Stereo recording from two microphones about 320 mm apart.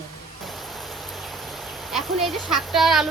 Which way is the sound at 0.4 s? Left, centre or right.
Centre.